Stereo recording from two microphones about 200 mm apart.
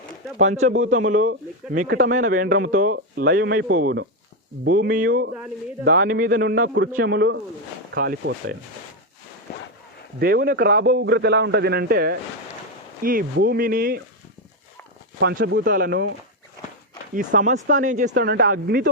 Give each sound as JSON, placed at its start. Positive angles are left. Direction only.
{"t": 0.9, "sound": "a man's voice", "side_deg": -40}
{"t": 10.2, "sound": "a man's voice", "side_deg": -50}
{"t": 15.2, "sound": "speech", "side_deg": -60}
{"t": 17.2, "sound": "speech", "side_deg": -40}
{"t": 18.1, "sound": "a man's voice", "side_deg": -55}